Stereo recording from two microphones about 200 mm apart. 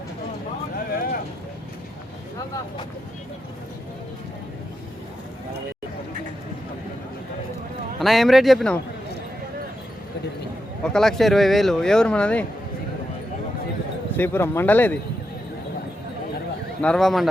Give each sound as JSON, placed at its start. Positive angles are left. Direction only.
{"t": 0.9, "sound": "a sound", "side_deg": 45}
{"t": 7.9, "sound": "speech", "side_deg": 0}
{"t": 10.8, "sound": "speech", "side_deg": 5}
{"t": 14.2, "sound": "speech", "side_deg": 10}
{"t": 16.8, "sound": "speech", "side_deg": 0}